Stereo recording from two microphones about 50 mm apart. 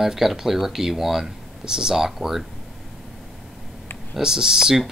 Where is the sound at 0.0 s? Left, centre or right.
Centre.